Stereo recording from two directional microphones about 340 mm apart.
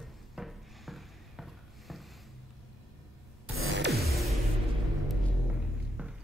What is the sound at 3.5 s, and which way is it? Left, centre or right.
Music, right.